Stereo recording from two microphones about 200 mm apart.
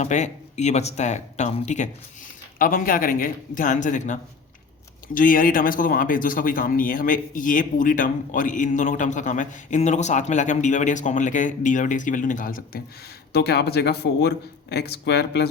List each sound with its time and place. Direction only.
0.0 s speech: 35° left (ahead or behind)
13.3 s speech: 55° left (ahead or behind)